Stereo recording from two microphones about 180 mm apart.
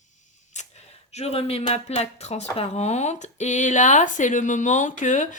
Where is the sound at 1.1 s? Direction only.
35° left (ahead or behind).